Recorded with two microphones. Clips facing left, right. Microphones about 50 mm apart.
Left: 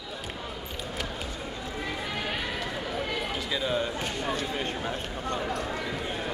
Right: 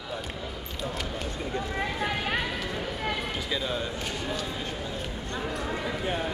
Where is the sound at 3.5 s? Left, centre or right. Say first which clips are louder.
Left 3 dB; centre.